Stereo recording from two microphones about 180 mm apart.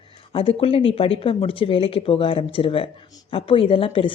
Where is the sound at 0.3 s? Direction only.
30° left (ahead or behind).